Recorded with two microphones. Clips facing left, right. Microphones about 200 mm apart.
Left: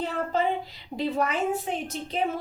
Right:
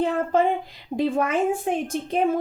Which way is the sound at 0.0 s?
50° right (ahead or behind).